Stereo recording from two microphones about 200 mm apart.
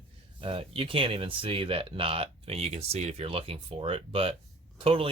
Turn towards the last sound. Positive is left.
turn(degrees=-25)  # may be behind; listen again after turning